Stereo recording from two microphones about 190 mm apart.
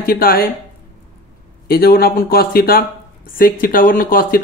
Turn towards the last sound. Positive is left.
turn(degrees=50)  # may be behind; listen again after turning